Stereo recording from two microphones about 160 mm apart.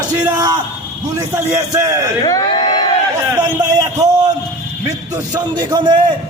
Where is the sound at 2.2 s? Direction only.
25° left (ahead or behind).